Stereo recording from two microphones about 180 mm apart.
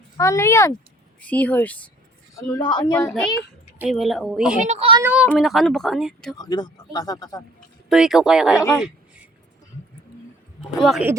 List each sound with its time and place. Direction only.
0.2 s speech: 15° left (ahead or behind)
2.3 s speech: 20° left (ahead or behind)
3.8 s speech: centre (ahead or behind)
4.6 s a child's voice: 35° right (ahead or behind)
5.0 s speech: 5° right (ahead or behind)
6.3 s speech: 25° left (ahead or behind)
7.9 s speech: centre (ahead or behind)
10.6 s speech: centre (ahead or behind)